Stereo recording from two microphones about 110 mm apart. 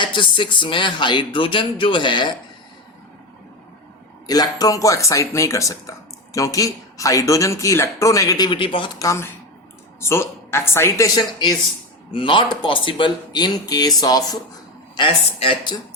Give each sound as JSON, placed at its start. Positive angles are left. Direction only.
{"t": 0.0, "sound": "speech", "side_deg": 45}
{"t": 4.3, "sound": "speech", "side_deg": 35}
{"t": 8.4, "sound": "speech", "side_deg": 50}
{"t": 9.0, "sound": "speech", "side_deg": 25}
{"t": 12.1, "sound": "speech", "side_deg": 50}
{"t": 14.9, "sound": "speech", "side_deg": 50}